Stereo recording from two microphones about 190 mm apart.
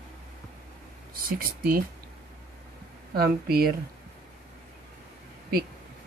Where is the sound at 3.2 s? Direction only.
55° right (ahead or behind).